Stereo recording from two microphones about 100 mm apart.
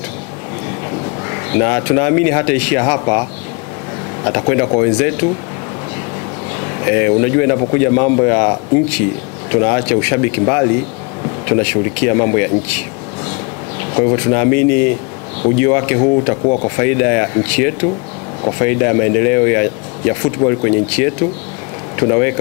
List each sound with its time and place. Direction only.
1.5 s speech: 15° left (ahead or behind)
4.3 s speech: 20° left (ahead or behind)
6.9 s speech: 15° left (ahead or behind)
9.5 s speech: 15° left (ahead or behind)
14.0 s speech: 20° left (ahead or behind)